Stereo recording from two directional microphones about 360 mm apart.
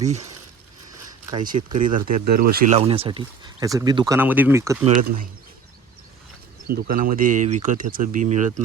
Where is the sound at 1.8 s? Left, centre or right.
Right.